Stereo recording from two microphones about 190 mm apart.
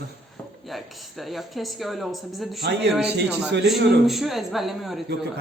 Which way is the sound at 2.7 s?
60° right (ahead or behind).